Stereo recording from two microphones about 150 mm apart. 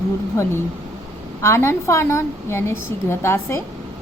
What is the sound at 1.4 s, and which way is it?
A woman's voice, 20° left (ahead or behind).